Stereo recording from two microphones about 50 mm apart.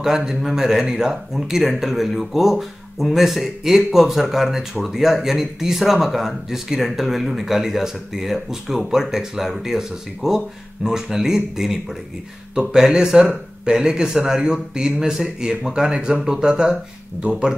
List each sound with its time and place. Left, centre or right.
0.0 s speech: centre